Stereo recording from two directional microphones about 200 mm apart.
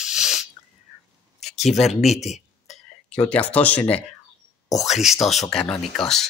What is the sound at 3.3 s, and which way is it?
Speech, 5° left (ahead or behind).